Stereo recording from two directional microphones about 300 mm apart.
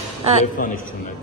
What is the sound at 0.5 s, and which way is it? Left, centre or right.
Speech, left.